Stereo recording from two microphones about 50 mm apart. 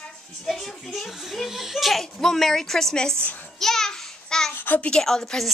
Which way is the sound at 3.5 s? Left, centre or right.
Centre.